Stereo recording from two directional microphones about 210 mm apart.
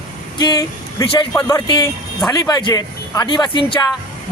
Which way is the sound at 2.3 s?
20° left (ahead or behind).